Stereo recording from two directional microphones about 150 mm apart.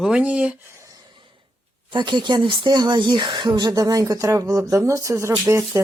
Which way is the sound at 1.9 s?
30° right (ahead or behind).